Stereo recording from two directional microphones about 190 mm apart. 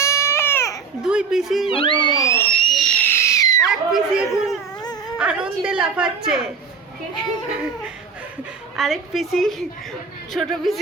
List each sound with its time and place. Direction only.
0.0 s baby cry: 15° left (ahead or behind)
1.0 s a woman's voice: 5° right (ahead or behind)
1.7 s cat: 25° left (ahead or behind)
3.7 s a woman's voice: 5° right (ahead or behind)
4.8 s dog: 20° left (ahead or behind)
5.1 s a woman's voice: 5° right (ahead or behind)
8.7 s a woman's voice: centre (ahead or behind)